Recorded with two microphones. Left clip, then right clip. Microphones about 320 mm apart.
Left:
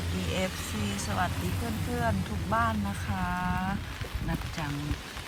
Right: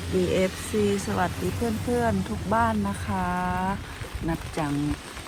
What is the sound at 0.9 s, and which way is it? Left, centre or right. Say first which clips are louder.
Speech: right 4 dB; centre.